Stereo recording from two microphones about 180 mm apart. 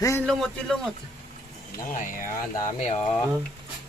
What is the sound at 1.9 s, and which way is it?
Speech, 50° left (ahead or behind).